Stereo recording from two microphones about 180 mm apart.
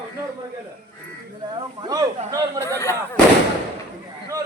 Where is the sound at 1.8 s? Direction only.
20° right (ahead or behind).